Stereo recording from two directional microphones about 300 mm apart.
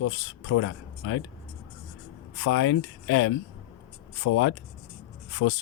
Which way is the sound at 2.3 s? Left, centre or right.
Left.